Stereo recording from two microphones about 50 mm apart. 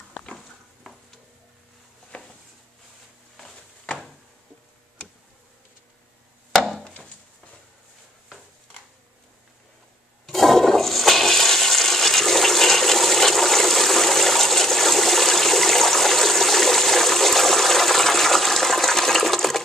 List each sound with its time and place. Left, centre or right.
0.1 s stir: centre
0.8 s stir: centre
2.1 s a sound: left
10.2 s toilet flush: centre